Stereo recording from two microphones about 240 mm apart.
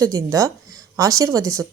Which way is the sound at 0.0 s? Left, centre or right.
Centre.